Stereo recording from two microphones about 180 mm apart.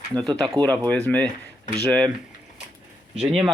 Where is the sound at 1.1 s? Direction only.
10° left (ahead or behind).